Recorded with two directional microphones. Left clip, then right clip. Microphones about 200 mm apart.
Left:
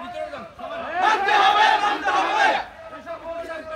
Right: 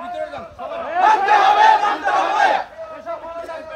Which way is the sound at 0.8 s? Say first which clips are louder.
Right 5 dB; 50° right (ahead or behind).